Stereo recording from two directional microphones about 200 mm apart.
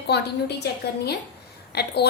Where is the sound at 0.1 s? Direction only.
55° left (ahead or behind).